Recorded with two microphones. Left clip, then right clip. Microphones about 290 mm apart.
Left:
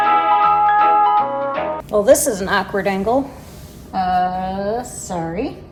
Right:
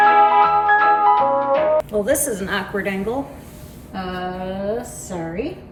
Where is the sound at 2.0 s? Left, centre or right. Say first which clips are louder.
Left 7 dB; centre.